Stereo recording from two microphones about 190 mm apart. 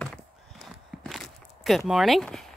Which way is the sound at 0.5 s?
Centre (ahead or behind).